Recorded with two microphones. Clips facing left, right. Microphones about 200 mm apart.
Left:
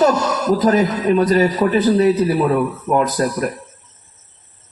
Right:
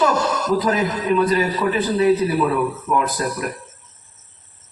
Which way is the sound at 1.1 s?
45° left (ahead or behind).